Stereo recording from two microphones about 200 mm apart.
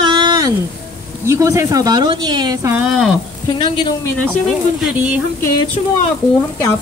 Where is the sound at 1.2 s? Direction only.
15° right (ahead or behind).